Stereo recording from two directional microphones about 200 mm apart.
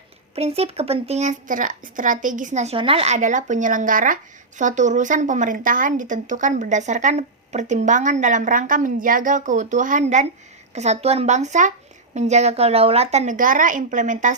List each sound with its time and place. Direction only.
0.3 s speech: 30° right (ahead or behind)